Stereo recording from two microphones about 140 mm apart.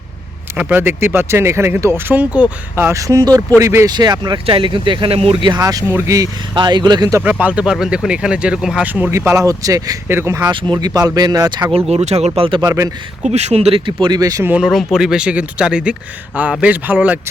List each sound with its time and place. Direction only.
0.5 s speech: 10° right (ahead or behind)
3.9 s speech: 30° right (ahead or behind)
7.2 s speech: 10° right (ahead or behind)
10.5 s speech: 35° right (ahead or behind)
11.9 s speech: 50° right (ahead or behind)
13.2 s speech: 50° right (ahead or behind); by 14.4 s 25° right (ahead or behind)
14.4 s speech: 10° right (ahead or behind)